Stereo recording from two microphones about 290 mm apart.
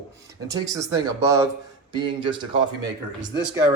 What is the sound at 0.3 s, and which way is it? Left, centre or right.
Speech, centre.